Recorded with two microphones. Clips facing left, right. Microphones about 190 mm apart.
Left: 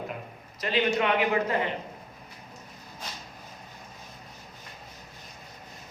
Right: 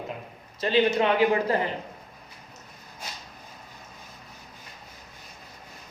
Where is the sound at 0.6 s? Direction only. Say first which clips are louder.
Right 4 dB; 30° right (ahead or behind).